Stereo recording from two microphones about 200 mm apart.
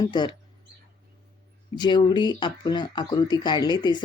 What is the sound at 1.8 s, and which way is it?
Speech, 20° left (ahead or behind).